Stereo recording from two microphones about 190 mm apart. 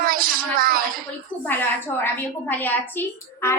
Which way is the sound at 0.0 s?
50° right (ahead or behind).